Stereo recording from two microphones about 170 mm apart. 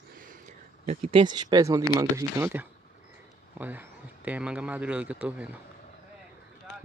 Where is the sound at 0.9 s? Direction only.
35° right (ahead or behind); by 5.6 s 10° right (ahead or behind).